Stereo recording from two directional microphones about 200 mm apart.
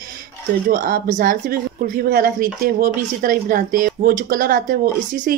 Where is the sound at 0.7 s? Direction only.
45° right (ahead or behind).